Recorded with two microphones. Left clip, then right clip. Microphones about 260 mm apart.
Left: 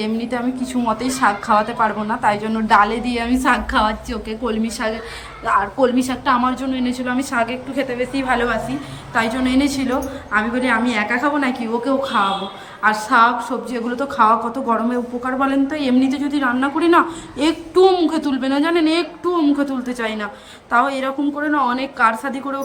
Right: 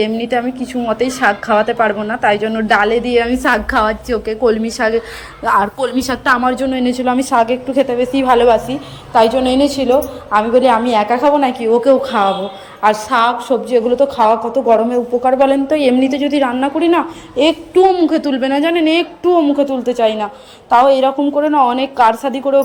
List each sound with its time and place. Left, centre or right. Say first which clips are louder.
0.0 s a woman's voice: right 7 dB; centre
5.5 s speech: right 3 dB; right
6.1 s a woman's voice: right 4 dB; centre